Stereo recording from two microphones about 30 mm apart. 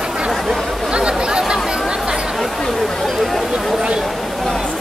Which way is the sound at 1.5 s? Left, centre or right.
Right.